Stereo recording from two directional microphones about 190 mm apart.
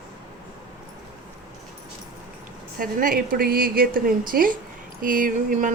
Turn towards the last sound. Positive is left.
turn(degrees=-45)  # may be behind; listen again after turning